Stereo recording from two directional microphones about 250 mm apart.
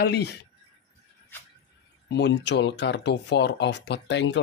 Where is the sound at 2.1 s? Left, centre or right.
Left.